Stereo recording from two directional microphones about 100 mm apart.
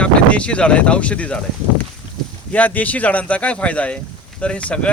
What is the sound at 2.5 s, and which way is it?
Speech, 15° left (ahead or behind).